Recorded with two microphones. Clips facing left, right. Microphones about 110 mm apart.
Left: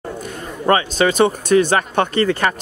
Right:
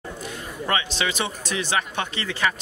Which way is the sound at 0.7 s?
45° left (ahead or behind).